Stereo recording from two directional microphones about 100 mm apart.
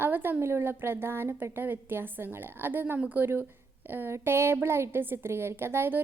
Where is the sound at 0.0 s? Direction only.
20° right (ahead or behind).